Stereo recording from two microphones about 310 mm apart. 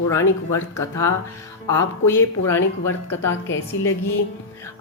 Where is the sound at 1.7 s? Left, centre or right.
Centre.